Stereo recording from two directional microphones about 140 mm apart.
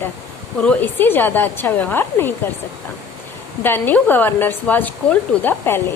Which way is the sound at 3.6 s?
15° left (ahead or behind).